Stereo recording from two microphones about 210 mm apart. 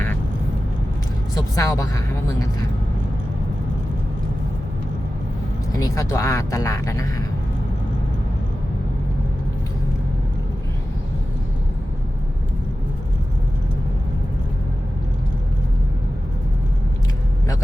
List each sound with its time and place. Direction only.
1.4 s speech: 15° left (ahead or behind)
5.7 s speech: 15° left (ahead or behind)